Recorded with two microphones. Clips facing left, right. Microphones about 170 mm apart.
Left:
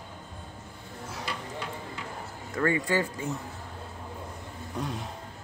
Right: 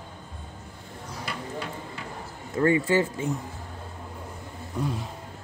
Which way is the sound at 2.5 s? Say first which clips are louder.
Right 5 dB; 25° right (ahead or behind).